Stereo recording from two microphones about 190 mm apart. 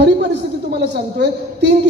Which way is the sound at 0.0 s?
60° right (ahead or behind).